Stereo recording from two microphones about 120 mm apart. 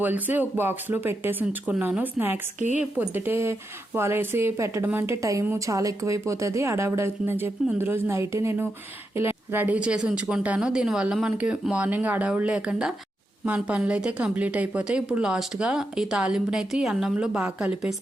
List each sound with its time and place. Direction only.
0.0 s a woman's voice: 15° right (ahead or behind)